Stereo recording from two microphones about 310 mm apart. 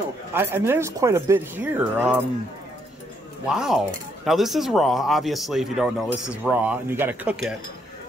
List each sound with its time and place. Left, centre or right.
0.3 s speech: centre
3.4 s speech: centre